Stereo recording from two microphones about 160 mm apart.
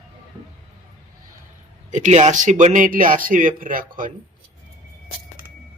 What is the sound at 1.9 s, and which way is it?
Speech, 50° right (ahead or behind).